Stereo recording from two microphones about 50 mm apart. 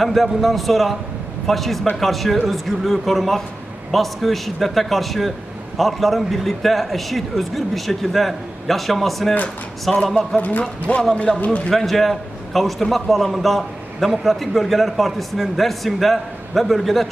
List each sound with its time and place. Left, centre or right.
0.0 s a man's voice: centre
10.6 s speech: left
11.7 s a man's voice: centre